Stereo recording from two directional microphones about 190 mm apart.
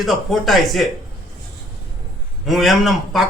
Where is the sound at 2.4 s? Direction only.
Centre (ahead or behind).